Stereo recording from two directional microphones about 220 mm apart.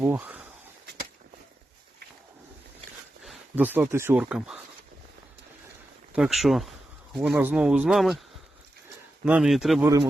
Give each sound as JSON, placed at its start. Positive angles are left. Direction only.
{"t": 0.0, "sound": "speech", "side_deg": -10}
{"t": 3.2, "sound": "speech", "side_deg": -5}
{"t": 6.1, "sound": "speech", "side_deg": 0}
{"t": 9.2, "sound": "speech", "side_deg": -5}
{"t": 9.8, "sound": "speech", "side_deg": -15}